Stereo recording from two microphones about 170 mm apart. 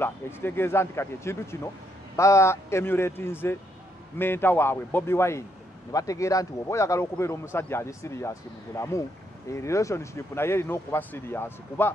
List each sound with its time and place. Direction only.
0.0 s speech: 15° left (ahead or behind)